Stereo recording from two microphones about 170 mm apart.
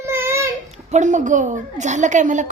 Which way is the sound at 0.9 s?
45° right (ahead or behind).